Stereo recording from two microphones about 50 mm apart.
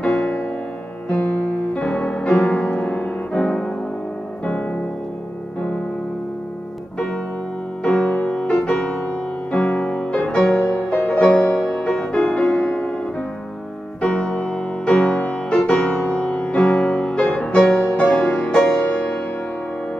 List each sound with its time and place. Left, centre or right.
0.0 s music: left
1.7 s music: centre
7.8 s music: centre
10.7 s music: left
11.1 s music: left
11.6 s music: centre
14.0 s music: left